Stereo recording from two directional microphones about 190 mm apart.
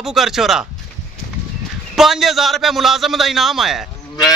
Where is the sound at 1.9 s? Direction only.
Centre (ahead or behind).